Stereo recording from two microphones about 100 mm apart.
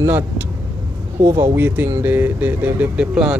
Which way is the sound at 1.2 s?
25° right (ahead or behind).